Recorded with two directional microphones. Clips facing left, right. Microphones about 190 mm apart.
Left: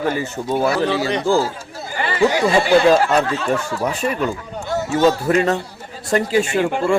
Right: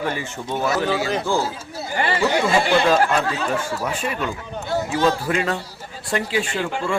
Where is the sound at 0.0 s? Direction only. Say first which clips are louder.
Left 5 dB; 40° left (ahead or behind).